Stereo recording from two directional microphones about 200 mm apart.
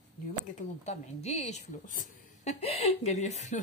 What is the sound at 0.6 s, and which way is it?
A woman's voice, 35° left (ahead or behind).